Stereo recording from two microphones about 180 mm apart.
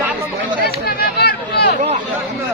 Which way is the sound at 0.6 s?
60° left (ahead or behind).